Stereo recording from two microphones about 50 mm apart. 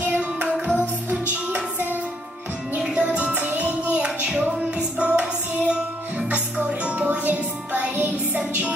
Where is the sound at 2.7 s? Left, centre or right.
Centre.